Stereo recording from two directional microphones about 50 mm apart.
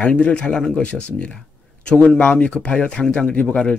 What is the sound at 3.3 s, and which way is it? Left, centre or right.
Speech, left.